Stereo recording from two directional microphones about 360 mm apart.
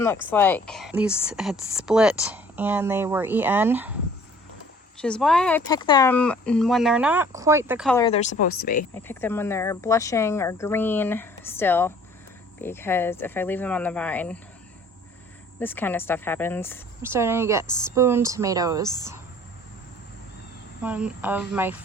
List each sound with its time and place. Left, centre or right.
0.0 s speech: centre
4.9 s speech: centre
7.9 s speech: centre
9.0 s speech: centre
15.5 s speech: centre
17.0 s speech: centre
20.8 s speech: centre